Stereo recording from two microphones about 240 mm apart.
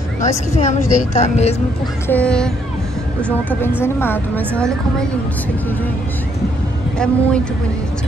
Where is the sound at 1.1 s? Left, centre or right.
Left.